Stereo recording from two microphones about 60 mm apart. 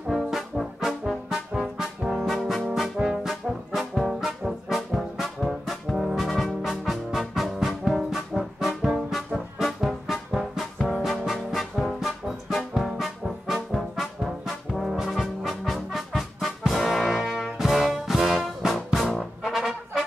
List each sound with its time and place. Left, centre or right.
0.1 s brass instrument: centre
3.7 s trombone: centre
9.6 s brass instrument: centre
16.7 s music: centre
19.4 s brass instrument: centre